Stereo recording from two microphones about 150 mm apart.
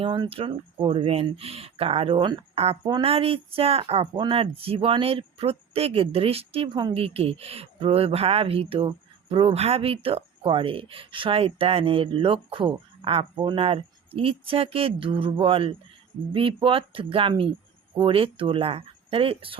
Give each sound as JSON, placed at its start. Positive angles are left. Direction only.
{"t": 0.0, "sound": "speech", "side_deg": -35}
{"t": 3.1, "sound": "speech", "side_deg": -40}